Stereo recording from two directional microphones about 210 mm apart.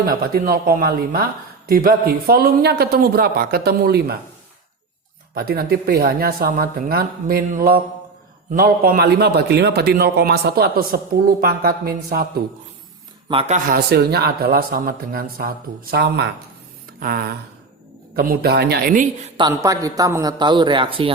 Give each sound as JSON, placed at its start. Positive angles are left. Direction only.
{"t": 0.0, "sound": "a man's voice", "side_deg": -45}
{"t": 5.3, "sound": "a man's voice", "side_deg": -45}
{"t": 13.2, "sound": "speech", "side_deg": -25}
{"t": 13.7, "sound": "a man's voice", "side_deg": -50}
{"t": 19.4, "sound": "a man's voice", "side_deg": -15}